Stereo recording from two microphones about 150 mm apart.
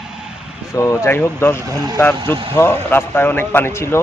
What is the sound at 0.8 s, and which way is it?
Speech, 20° left (ahead or behind).